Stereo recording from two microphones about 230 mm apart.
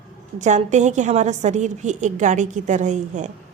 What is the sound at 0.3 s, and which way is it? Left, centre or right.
A woman's voice, right.